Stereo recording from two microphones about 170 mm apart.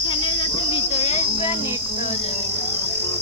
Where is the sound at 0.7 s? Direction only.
35° left (ahead or behind).